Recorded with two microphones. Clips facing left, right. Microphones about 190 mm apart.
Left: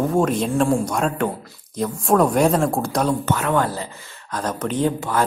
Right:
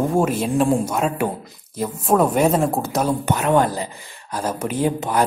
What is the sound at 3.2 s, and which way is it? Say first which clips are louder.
Speech: right 3 dB; 20° right (ahead or behind).